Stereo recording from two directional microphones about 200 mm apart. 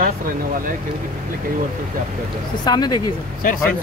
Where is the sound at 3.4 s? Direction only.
40° left (ahead or behind).